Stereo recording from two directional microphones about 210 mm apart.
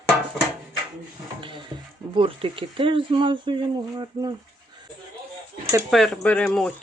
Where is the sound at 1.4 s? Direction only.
25° right (ahead or behind).